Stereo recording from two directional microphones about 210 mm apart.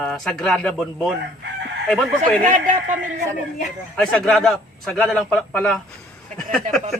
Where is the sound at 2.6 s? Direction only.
35° right (ahead or behind).